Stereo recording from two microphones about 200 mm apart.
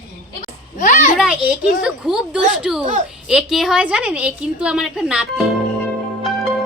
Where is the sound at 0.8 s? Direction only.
40° left (ahead or behind).